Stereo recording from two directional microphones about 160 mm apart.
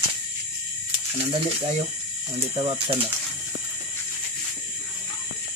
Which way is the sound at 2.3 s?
35° right (ahead or behind).